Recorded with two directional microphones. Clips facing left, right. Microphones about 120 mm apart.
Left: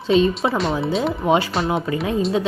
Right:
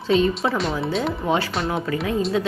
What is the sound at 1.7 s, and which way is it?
Speech, 25° left (ahead or behind).